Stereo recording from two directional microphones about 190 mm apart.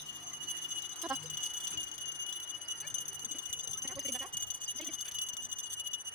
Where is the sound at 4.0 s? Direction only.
Centre (ahead or behind).